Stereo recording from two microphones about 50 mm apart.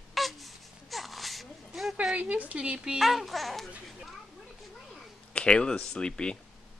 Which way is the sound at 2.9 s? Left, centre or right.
Centre.